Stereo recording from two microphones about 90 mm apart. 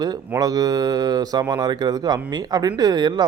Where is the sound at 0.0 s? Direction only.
45° right (ahead or behind).